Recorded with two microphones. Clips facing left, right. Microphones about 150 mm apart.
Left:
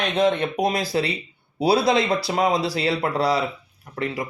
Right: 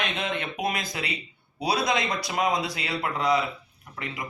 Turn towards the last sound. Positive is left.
turn(degrees=35)  # may be behind; listen again after turning